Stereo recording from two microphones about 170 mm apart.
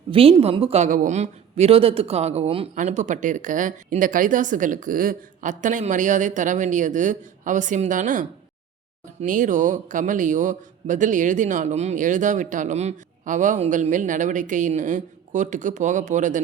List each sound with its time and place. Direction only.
0.1 s a woman's voice: 35° right (ahead or behind)